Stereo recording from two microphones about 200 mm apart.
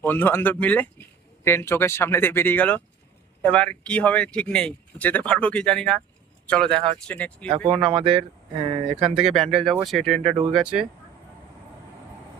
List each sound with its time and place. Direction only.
0.0 s speech: 10° left (ahead or behind)
7.9 s speech: 25° right (ahead or behind)
9.1 s speech: centre (ahead or behind)